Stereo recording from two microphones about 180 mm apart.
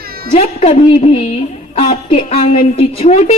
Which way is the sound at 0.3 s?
35° left (ahead or behind).